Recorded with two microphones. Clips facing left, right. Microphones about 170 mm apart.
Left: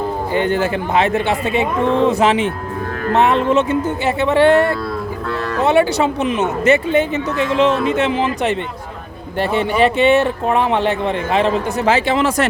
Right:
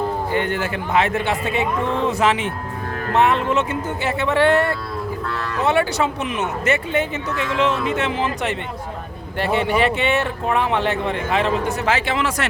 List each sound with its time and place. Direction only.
0.3 s speech: 30° left (ahead or behind)
9.4 s speech: 30° left (ahead or behind)